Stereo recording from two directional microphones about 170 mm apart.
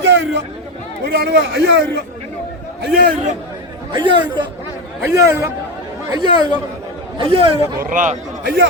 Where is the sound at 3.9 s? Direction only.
25° right (ahead or behind).